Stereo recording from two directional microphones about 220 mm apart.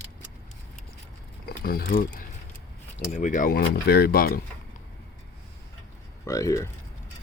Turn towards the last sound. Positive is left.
turn(degrees=15)  # may be behind; listen again after turning